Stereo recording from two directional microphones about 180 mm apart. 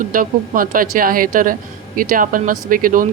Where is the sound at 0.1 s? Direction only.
50° right (ahead or behind).